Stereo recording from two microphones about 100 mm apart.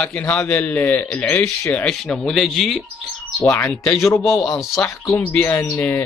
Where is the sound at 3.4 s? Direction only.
20° left (ahead or behind).